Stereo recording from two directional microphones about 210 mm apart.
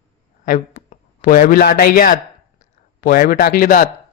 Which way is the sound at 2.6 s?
40° left (ahead or behind).